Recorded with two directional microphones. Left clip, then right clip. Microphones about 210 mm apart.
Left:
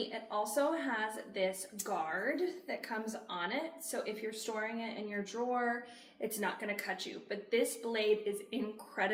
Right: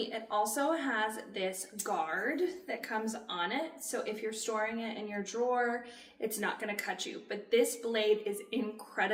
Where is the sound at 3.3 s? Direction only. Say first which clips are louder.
Even; 20° right (ahead or behind).